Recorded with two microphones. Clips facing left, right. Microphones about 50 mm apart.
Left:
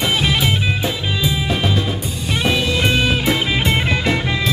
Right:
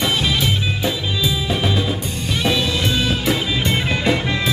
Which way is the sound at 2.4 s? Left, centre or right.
Left.